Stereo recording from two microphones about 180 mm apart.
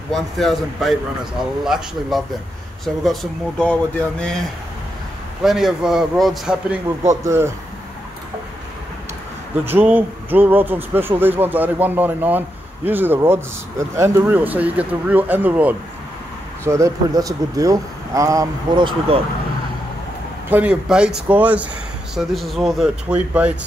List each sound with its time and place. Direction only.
0.1 s speech: centre (ahead or behind)
5.4 s speech: centre (ahead or behind)
7.2 s speech: 15° right (ahead or behind)
9.7 s speech: 10° right (ahead or behind); by 19.2 s 30° right (ahead or behind)
20.4 s speech: 10° right (ahead or behind)